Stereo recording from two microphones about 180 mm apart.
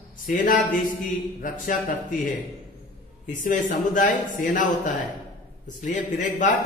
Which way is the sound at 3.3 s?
45° left (ahead or behind).